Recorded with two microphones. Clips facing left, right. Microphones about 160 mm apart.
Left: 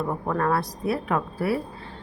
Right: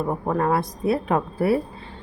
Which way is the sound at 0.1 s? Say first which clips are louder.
Right 3 dB; 20° right (ahead or behind).